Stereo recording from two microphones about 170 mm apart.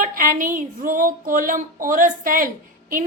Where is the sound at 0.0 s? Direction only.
55° right (ahead or behind).